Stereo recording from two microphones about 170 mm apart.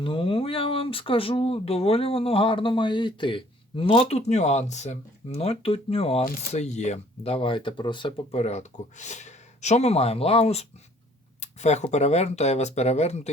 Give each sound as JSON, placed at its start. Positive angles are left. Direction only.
{"t": 0.0, "sound": "speech", "side_deg": 30}